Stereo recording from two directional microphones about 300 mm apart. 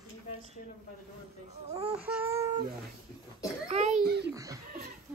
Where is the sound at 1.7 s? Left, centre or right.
Centre.